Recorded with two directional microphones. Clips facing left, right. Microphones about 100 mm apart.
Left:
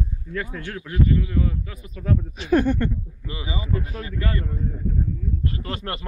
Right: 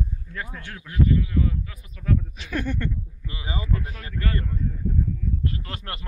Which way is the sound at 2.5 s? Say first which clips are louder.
Left 9 dB; 40° left (ahead or behind).